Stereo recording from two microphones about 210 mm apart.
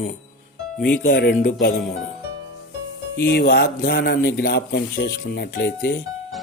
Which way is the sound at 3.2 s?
50° left (ahead or behind).